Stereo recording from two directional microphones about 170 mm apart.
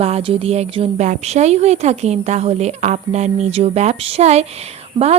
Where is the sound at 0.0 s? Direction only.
35° right (ahead or behind).